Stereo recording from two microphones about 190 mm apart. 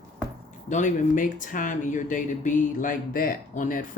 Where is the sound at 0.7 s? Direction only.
40° left (ahead or behind).